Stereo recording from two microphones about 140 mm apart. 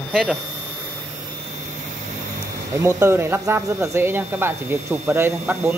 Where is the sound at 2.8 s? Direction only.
20° right (ahead or behind).